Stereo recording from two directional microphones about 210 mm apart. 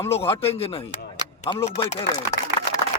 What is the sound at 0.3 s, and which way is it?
A man's voice, 25° left (ahead or behind).